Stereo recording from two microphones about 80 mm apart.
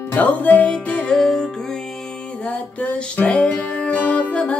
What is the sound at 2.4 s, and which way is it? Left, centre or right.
Music, centre.